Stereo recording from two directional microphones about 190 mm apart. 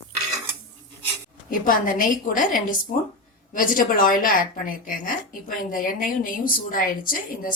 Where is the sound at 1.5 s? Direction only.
45° left (ahead or behind).